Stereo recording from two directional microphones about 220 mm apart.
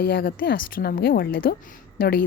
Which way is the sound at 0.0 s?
45° left (ahead or behind).